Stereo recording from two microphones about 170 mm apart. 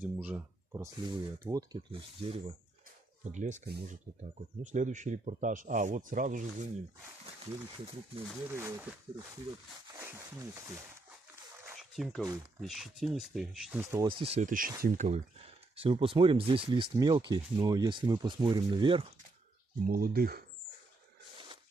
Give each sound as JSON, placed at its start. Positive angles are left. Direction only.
{"t": 0.0, "sound": "speech", "side_deg": -10}
{"t": 1.9, "sound": "speech", "side_deg": -35}
{"t": 3.3, "sound": "speech", "side_deg": -45}
{"t": 8.5, "sound": "speech", "side_deg": -15}
{"t": 9.9, "sound": "speech", "side_deg": -15}
{"t": 11.9, "sound": "speech", "side_deg": 0}
{"t": 14.0, "sound": "speech", "side_deg": -30}
{"t": 14.4, "sound": "speech", "side_deg": -55}
{"t": 15.7, "sound": "speech", "side_deg": -35}
{"t": 19.8, "sound": "speech", "side_deg": -60}